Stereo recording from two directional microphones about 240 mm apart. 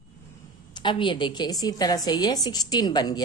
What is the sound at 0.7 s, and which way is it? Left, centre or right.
A woman's voice, centre.